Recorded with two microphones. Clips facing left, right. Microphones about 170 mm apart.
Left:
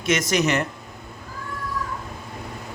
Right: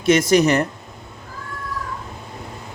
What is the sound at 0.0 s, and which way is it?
Speech, 30° right (ahead or behind).